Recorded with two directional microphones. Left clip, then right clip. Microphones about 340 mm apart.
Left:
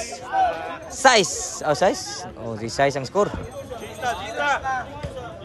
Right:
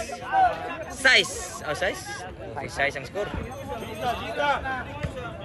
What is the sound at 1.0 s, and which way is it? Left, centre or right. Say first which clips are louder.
Speech: left 3 dB; centre.